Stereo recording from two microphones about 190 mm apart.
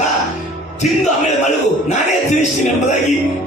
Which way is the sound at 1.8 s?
40° left (ahead or behind).